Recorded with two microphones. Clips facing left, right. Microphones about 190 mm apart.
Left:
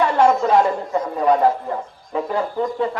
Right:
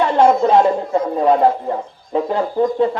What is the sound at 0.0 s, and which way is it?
A child's voice, 25° right (ahead or behind).